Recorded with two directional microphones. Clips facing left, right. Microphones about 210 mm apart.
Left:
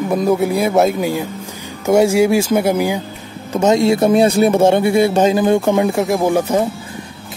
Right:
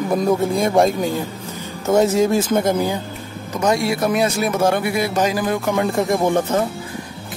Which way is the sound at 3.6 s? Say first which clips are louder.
Left 6 dB; 25° left (ahead or behind).